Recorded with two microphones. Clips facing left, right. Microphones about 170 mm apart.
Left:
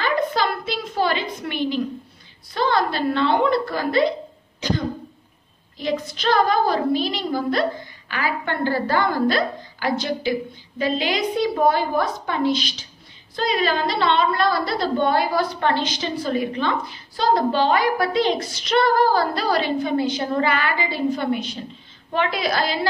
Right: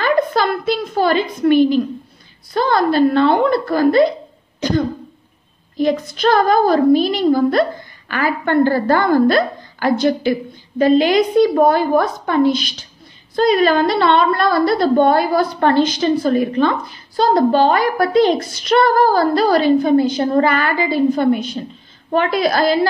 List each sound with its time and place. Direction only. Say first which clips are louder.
0.0 s a woman's voice: right 5 dB; 50° right (ahead or behind)
4.6 s cough: right 7 dB; 50° right (ahead or behind)
5.8 s a woman's voice: right 8 dB; 50° right (ahead or behind)